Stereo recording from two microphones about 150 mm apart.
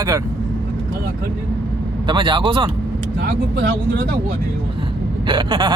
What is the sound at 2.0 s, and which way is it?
Speech, 30° right (ahead or behind).